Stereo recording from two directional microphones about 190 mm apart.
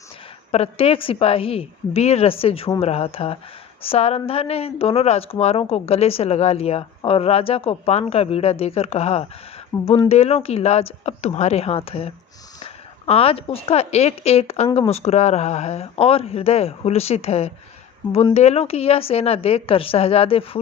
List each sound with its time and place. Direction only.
0.5 s a woman's voice: 30° left (ahead or behind)